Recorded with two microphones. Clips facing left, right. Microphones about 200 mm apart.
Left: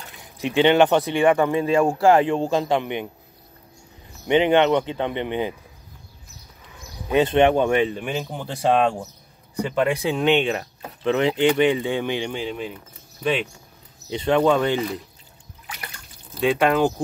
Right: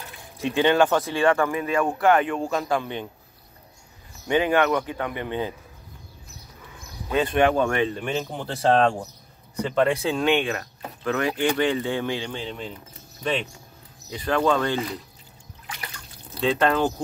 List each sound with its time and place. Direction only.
0.4 s speech: 20° left (ahead or behind)
4.3 s speech: 20° left (ahead or behind)
7.1 s speech: 20° left (ahead or behind)
14.1 s speech: 25° left (ahead or behind)
16.3 s speech: 10° left (ahead or behind)